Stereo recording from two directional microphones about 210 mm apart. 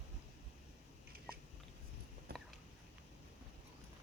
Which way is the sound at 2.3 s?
45° right (ahead or behind).